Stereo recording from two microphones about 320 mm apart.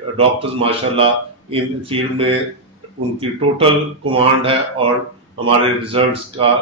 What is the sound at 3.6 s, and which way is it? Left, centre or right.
A man's voice, centre.